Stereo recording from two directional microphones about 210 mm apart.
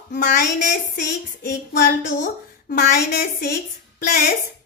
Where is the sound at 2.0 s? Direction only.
55° left (ahead or behind).